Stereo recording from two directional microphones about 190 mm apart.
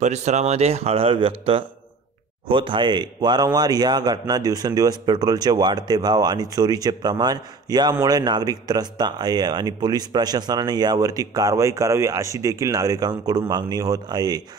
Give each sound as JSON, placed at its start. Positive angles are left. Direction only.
{"t": 0.0, "sound": "a man's voice", "side_deg": -35}